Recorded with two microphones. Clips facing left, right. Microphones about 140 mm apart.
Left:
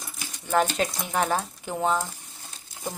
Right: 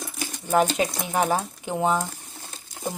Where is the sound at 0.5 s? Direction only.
10° right (ahead or behind).